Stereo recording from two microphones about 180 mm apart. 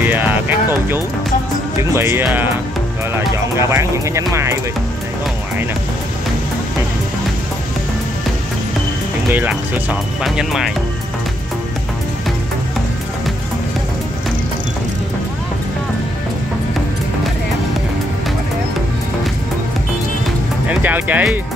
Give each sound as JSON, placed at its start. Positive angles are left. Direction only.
{"t": 0.0, "sound": "music", "side_deg": -10}
{"t": 1.8, "sound": "speech", "side_deg": -15}
{"t": 9.3, "sound": "speech", "side_deg": -10}
{"t": 20.6, "sound": "speech", "side_deg": -10}